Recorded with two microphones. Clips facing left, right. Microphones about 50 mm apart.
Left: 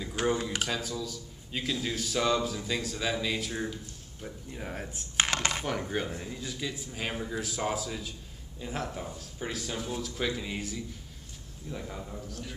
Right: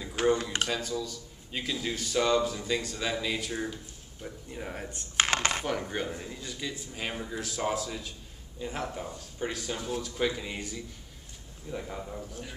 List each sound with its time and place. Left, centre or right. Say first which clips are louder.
0.6 s speech: right 2 dB; centre
5.3 s speech: right 2 dB; right
5.7 s a man's voice: even; centre